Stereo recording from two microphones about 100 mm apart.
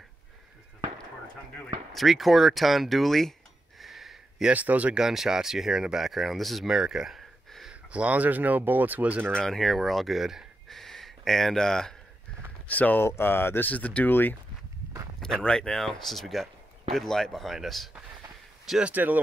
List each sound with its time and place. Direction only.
1.9 s speech: centre (ahead or behind)
3.8 s a sound: centre (ahead or behind)
4.5 s speech: 15° right (ahead or behind)
9.3 s speech: 5° left (ahead or behind)
12.6 s speech: 15° left (ahead or behind)
15.1 s speech: 5° left (ahead or behind)
18.7 s speech: 10° right (ahead or behind)